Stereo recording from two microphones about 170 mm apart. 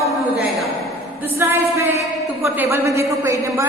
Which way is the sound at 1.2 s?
15° right (ahead or behind).